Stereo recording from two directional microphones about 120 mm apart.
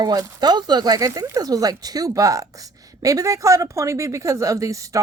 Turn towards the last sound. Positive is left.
turn(degrees=-25)  # may be behind; listen again after turning